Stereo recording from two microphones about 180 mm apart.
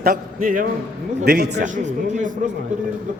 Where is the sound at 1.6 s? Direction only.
45° right (ahead or behind).